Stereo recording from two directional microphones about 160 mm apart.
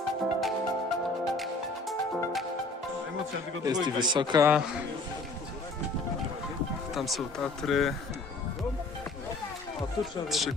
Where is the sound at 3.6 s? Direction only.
25° right (ahead or behind).